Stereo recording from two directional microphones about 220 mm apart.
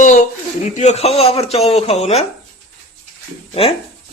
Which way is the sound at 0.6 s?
35° left (ahead or behind).